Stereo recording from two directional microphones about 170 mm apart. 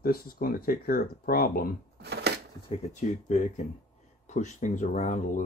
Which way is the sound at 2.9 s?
45° left (ahead or behind).